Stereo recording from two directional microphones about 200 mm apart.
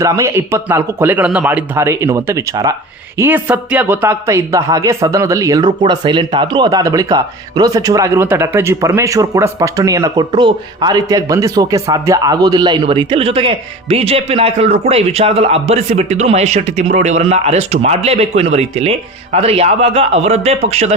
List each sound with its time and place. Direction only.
0.0 s a man's voice: 15° right (ahead or behind); by 20.9 s 35° right (ahead or behind)